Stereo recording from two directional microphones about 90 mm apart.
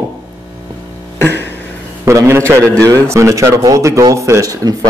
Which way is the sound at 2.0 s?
30° right (ahead or behind).